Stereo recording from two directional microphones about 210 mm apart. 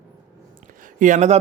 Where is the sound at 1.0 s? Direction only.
35° right (ahead or behind).